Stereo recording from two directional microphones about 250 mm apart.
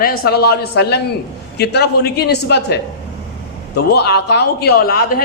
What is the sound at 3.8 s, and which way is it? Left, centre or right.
Speech, left.